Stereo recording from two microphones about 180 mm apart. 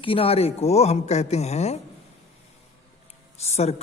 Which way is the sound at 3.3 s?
35° left (ahead or behind).